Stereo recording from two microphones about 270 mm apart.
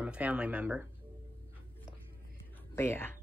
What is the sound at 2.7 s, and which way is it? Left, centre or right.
Speech, centre.